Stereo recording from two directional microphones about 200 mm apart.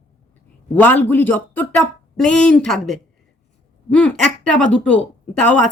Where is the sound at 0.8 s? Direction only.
10° left (ahead or behind).